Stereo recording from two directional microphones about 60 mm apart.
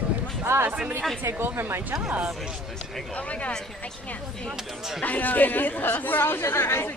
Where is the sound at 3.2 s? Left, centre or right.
Left.